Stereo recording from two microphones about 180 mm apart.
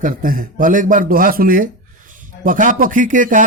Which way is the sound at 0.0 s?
50° right (ahead or behind).